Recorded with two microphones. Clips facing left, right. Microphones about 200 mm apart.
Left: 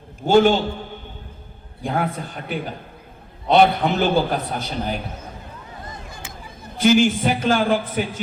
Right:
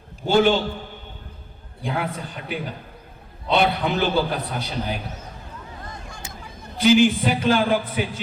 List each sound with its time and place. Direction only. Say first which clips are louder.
0.3 s a man's voice: left 3 dB; 45° left (ahead or behind)
1.8 s a man's voice: left 3 dB; 45° left (ahead or behind)
6.7 s a man's voice: even; 45° left (ahead or behind)